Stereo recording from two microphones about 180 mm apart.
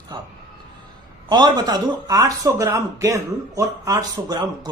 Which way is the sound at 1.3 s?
25° right (ahead or behind).